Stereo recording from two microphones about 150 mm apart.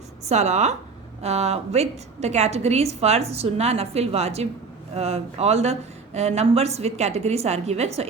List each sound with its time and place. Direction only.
0.3 s a woman's voice: 50° right (ahead or behind)